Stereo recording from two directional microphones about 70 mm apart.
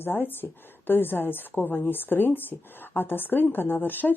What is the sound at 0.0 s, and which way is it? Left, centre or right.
A woman's voice, left.